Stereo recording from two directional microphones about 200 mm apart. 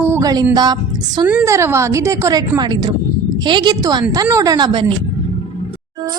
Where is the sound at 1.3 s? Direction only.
10° right (ahead or behind).